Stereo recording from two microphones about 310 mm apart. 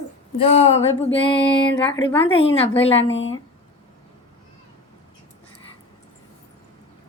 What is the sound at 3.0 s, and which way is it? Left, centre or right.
Speech, left.